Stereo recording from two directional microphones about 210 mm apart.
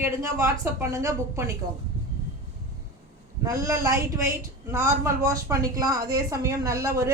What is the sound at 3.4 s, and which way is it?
A woman's voice, 15° right (ahead or behind).